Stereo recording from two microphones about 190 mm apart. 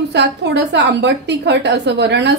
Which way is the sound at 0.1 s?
65° right (ahead or behind).